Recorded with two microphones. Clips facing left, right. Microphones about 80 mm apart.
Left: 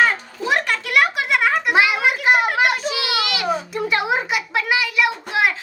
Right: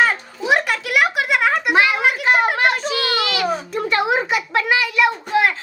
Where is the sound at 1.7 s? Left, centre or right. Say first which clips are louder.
Right 1 dB; centre.